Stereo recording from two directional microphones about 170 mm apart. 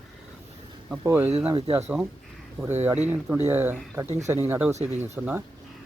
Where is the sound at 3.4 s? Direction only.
15° right (ahead or behind).